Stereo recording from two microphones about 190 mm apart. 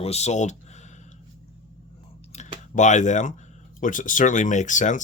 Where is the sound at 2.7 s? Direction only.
40° left (ahead or behind).